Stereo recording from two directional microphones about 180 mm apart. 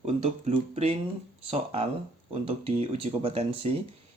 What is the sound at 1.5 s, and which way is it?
Speech, 35° right (ahead or behind).